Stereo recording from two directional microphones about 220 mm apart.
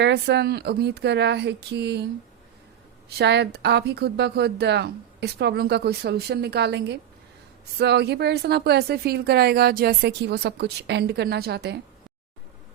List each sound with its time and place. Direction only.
0.0 s speech: 50° right (ahead or behind)
3.1 s speech: 50° right (ahead or behind)